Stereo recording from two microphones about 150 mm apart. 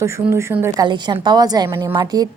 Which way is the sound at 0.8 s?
30° right (ahead or behind).